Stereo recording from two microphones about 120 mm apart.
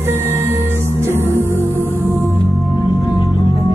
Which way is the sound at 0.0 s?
20° right (ahead or behind).